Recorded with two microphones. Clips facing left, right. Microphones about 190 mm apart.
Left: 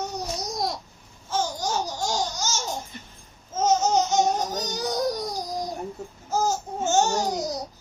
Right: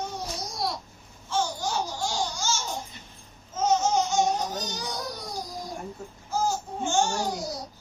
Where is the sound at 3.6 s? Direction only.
40° left (ahead or behind).